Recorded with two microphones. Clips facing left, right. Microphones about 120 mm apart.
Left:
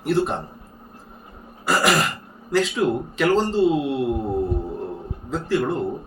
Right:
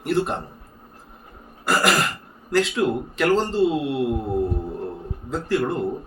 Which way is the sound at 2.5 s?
Centre (ahead or behind).